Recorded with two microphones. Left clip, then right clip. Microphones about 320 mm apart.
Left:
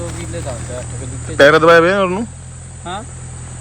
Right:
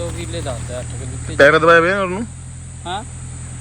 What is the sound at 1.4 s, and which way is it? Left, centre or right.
Speech, centre.